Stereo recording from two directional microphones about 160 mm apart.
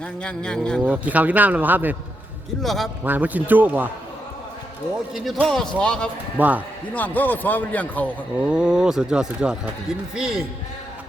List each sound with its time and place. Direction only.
0.0 s speech: 5° left (ahead or behind)
0.9 s speech: 10° right (ahead or behind)
2.6 s speech: centre (ahead or behind)
3.0 s speech: 10° right (ahead or behind)
5.1 s speech: centre (ahead or behind)
6.3 s speech: 10° right (ahead or behind)
6.9 s speech: 10° left (ahead or behind)
8.4 s speech: 5° right (ahead or behind)